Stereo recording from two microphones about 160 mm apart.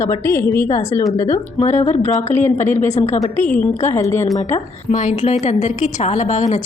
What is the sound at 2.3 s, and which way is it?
A woman's voice, 50° left (ahead or behind).